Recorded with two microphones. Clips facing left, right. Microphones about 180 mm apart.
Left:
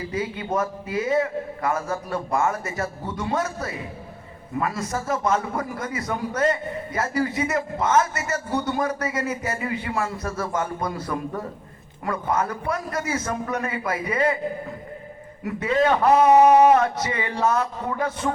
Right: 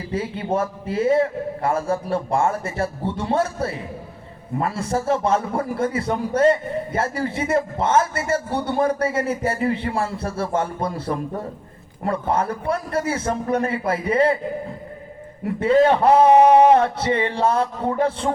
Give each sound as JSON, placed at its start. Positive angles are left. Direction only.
{"t": 0.1, "sound": "a man's voice", "side_deg": -30}
{"t": 15.4, "sound": "a man's voice", "side_deg": -30}